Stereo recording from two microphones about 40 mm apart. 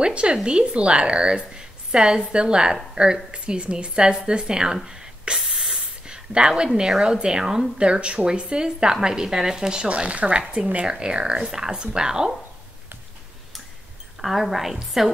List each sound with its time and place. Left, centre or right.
0.0 s a woman's voice: right
9.8 s speech: right
10.9 s a woman's voice: right
14.2 s a woman's voice: centre